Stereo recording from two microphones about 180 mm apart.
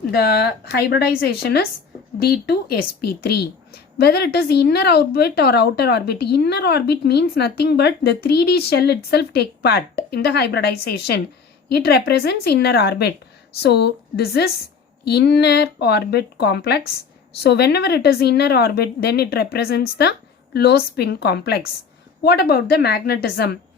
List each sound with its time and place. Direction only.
0.1 s a woman's voice: 65° left (ahead or behind)